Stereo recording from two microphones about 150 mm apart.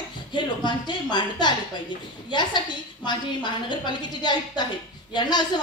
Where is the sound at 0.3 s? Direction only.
30° left (ahead or behind).